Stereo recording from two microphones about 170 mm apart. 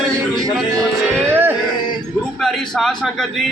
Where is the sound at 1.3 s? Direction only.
15° right (ahead or behind).